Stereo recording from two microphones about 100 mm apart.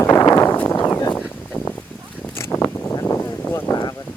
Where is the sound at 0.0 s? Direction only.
30° left (ahead or behind).